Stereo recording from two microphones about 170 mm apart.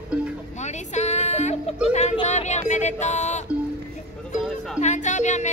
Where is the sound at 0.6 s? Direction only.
40° left (ahead or behind).